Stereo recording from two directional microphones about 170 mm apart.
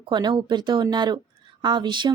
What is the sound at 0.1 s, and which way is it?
Speech, 25° right (ahead or behind).